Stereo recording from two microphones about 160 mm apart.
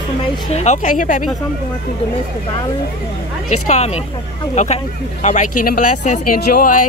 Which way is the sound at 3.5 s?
45° left (ahead or behind).